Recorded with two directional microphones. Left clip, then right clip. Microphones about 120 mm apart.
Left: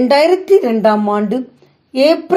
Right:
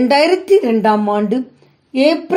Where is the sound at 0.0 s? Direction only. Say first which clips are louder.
Left 2 dB; 30° left (ahead or behind).